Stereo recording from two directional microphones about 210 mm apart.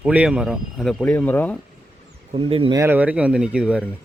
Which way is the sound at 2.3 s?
25° right (ahead or behind).